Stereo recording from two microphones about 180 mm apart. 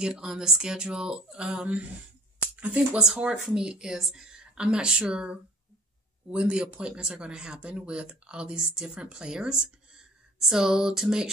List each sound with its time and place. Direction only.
0.0 s speech: 5° right (ahead or behind)